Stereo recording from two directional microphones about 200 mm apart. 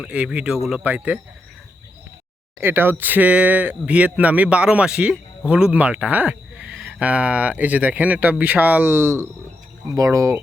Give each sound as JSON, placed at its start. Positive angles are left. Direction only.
{"t": 0.1, "sound": "speech", "side_deg": -5}
{"t": 2.6, "sound": "speech", "side_deg": -10}